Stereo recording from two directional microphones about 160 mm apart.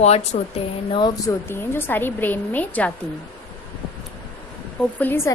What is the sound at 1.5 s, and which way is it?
A woman's voice, 15° left (ahead or behind).